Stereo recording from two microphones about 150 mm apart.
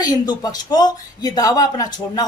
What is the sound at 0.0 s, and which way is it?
Speech, 25° left (ahead or behind).